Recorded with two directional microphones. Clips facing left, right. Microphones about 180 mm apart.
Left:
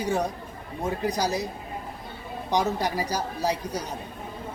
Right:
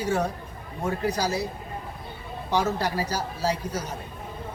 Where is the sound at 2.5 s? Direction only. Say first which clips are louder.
Even; 15° left (ahead or behind).